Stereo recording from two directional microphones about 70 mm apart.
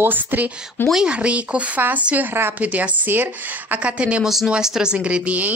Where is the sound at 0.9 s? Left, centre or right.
Centre.